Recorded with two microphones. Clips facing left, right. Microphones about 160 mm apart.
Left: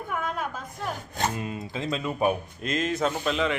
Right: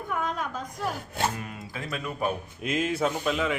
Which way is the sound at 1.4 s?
25° left (ahead or behind).